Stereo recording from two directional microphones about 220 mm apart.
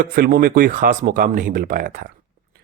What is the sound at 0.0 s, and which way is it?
Speech, 40° right (ahead or behind).